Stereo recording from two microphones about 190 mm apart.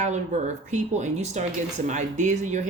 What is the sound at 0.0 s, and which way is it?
Speech, 40° right (ahead or behind).